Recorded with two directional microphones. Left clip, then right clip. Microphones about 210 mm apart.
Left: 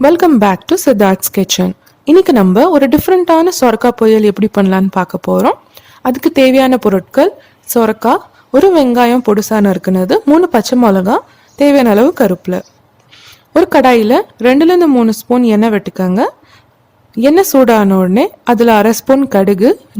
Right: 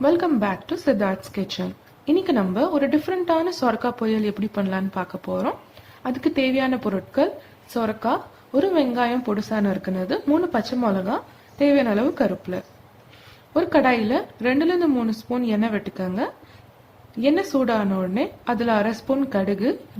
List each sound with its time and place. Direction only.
0.0 s speech: 50° left (ahead or behind)